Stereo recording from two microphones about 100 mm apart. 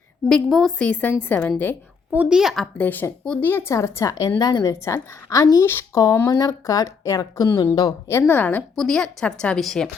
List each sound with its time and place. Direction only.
0.3 s a woman's voice: 5° left (ahead or behind)
0.8 s a woman's voice: 15° left (ahead or behind)
2.1 s a woman's voice: 5° right (ahead or behind)
2.7 s a woman's voice: 15° left (ahead or behind); by 4.7 s 40° left (ahead or behind)
4.7 s a woman's voice: 30° left (ahead or behind)
5.6 s speech: 25° left (ahead or behind)
6.2 s a woman's voice: 35° left (ahead or behind)
8.3 s a woman's voice: 15° left (ahead or behind)
8.8 s a woman's voice: 5° left (ahead or behind)